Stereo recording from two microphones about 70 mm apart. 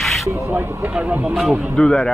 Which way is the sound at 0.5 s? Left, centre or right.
Right.